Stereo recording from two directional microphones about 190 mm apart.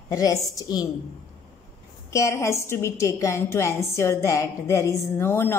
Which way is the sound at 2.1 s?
15° left (ahead or behind).